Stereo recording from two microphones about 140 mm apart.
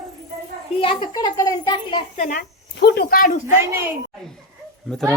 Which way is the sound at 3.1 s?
85° left.